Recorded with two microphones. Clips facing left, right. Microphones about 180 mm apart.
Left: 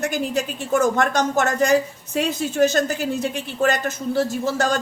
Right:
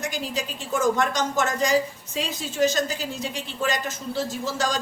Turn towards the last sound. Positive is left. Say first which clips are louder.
# left 5 dB
turn(degrees=55)  # may be behind; listen again after turning